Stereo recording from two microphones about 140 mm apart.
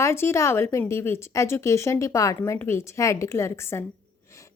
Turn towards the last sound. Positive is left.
turn(degrees=20)  # may be behind; listen again after turning